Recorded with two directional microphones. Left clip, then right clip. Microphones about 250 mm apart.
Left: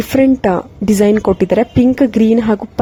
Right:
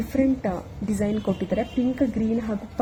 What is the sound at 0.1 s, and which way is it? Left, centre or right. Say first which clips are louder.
Speech: left 12 dB; left.